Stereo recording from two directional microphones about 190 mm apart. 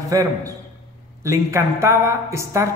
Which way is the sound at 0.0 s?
15° right (ahead or behind).